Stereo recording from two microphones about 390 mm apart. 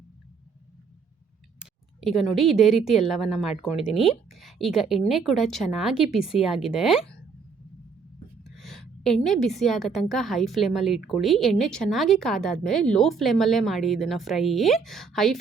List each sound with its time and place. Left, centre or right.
1.5 s a woman's voice: centre
8.4 s a woman's voice: centre